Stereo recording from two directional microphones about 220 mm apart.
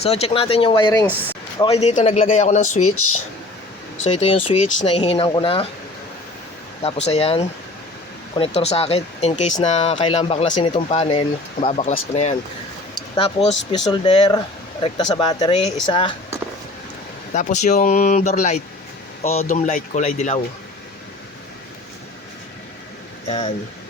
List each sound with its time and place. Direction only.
0.0 s speech: 25° left (ahead or behind)
2.8 s speech: 75° left (ahead or behind)
4.0 s speech: 25° left (ahead or behind)
6.8 s speech: 30° left (ahead or behind)
17.3 s speech: 35° left (ahead or behind)
23.2 s speech: 30° left (ahead or behind)